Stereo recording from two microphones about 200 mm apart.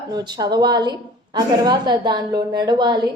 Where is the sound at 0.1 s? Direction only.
20° right (ahead or behind).